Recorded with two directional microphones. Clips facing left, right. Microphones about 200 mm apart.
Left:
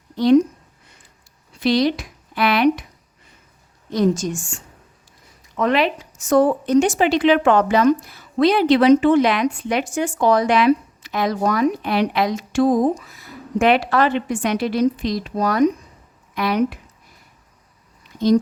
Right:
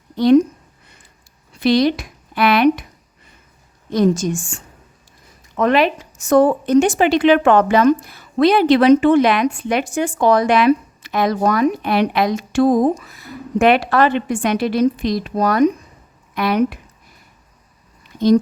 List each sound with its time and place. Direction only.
1.5 s a woman's voice: 60° right (ahead or behind)
3.9 s a woman's voice: 55° right (ahead or behind)
5.5 s a woman's voice: 50° right (ahead or behind)